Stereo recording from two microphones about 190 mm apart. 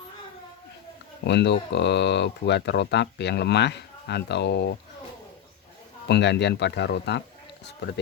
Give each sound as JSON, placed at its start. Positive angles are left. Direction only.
{"t": 1.2, "sound": "speech", "side_deg": 65}
{"t": 6.1, "sound": "speech", "side_deg": 65}